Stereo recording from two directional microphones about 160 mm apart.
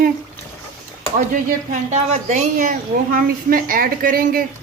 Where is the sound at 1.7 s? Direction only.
45° right (ahead or behind).